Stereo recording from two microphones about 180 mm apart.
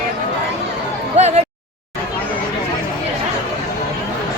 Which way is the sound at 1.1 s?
35° right (ahead or behind).